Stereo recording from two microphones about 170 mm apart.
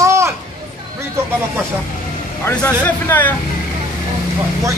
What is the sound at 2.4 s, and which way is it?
Speech, 15° left (ahead or behind).